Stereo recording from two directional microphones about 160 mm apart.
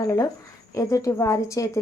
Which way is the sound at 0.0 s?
20° left (ahead or behind).